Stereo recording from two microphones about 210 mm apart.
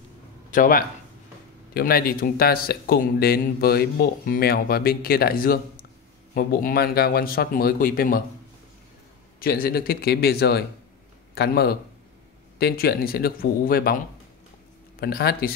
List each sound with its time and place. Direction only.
0.5 s speech: 40° left (ahead or behind)
9.4 s speech: 45° left (ahead or behind)